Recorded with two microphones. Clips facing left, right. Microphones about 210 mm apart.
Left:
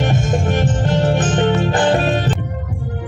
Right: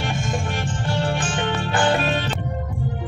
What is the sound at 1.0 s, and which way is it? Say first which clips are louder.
Music: left 10 dB; 40° left (ahead or behind).